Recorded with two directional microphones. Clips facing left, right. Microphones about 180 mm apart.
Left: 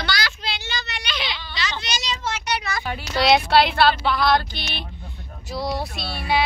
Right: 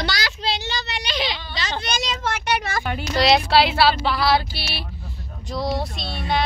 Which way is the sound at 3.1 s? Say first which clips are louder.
Even; centre (ahead or behind).